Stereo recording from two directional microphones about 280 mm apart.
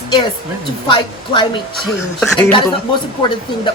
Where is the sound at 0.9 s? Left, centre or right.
Centre.